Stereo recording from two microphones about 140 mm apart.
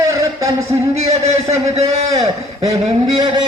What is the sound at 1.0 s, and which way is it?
A man's voice, 50° right (ahead or behind).